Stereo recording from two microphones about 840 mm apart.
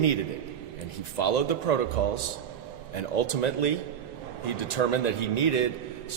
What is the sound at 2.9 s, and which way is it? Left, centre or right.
Speech, left.